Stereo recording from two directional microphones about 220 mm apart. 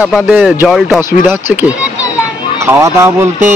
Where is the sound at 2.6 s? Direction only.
15° right (ahead or behind).